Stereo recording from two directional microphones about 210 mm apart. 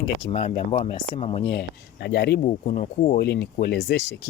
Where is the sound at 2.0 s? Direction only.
50° left (ahead or behind).